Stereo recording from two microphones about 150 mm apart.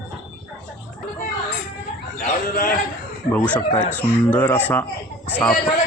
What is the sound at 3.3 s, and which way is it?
A man's voice, 10° left (ahead or behind).